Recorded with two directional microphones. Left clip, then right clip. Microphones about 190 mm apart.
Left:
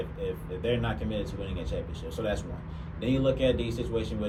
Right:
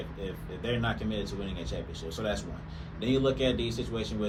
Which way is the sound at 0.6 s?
15° right (ahead or behind).